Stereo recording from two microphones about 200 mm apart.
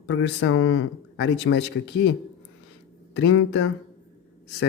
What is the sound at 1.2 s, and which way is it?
Speech, 60° left (ahead or behind).